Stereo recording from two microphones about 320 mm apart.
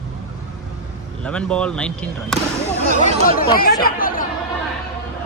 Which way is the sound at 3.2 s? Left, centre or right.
Left.